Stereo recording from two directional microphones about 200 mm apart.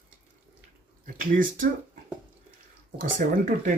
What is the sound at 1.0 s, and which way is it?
Speech, 45° right (ahead or behind).